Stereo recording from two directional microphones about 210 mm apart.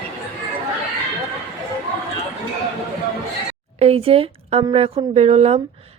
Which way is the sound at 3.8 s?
30° right (ahead or behind).